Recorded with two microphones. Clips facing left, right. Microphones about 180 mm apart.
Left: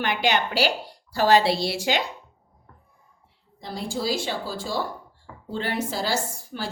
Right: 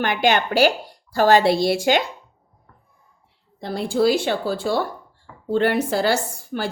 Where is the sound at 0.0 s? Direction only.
50° right (ahead or behind).